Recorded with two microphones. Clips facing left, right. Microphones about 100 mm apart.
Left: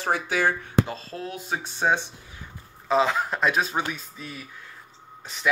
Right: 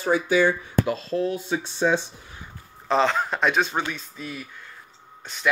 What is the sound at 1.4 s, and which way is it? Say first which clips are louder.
Speech: right 3 dB; 45° left (ahead or behind).